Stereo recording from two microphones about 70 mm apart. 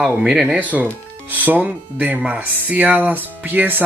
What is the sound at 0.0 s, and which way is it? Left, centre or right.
Speech, centre.